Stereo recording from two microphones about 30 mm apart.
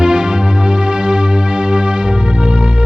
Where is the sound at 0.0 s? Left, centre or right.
Right.